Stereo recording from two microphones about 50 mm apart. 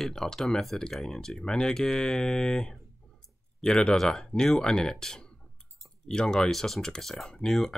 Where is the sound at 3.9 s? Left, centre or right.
Centre.